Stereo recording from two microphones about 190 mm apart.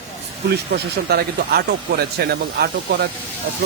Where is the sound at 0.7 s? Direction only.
60° right (ahead or behind).